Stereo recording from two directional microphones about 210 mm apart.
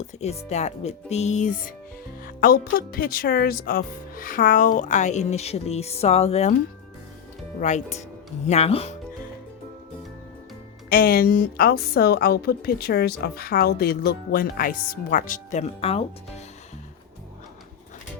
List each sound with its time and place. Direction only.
0.0 s speech: 30° left (ahead or behind)
7.6 s speech: 35° left (ahead or behind)
10.8 s a woman's voice: 45° left (ahead or behind); by 16.4 s 30° left (ahead or behind)